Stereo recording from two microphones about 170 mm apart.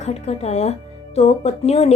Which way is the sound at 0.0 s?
40° left (ahead or behind).